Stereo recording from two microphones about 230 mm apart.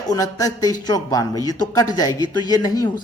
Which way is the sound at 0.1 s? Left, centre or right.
Centre.